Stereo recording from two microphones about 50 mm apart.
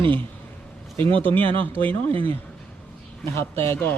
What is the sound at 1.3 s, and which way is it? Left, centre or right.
Speech, left.